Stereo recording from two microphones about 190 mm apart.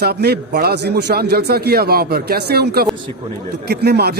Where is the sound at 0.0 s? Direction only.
55° right (ahead or behind).